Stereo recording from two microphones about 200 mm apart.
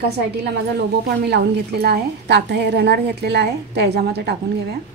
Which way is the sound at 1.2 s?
55° right (ahead or behind).